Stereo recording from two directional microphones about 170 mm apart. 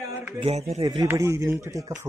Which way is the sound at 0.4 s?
40° right (ahead or behind).